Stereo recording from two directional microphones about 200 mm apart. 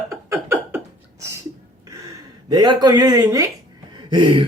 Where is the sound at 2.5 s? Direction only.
20° right (ahead or behind).